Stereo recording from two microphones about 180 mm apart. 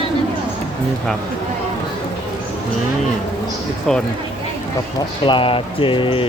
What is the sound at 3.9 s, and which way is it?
Speech, centre (ahead or behind).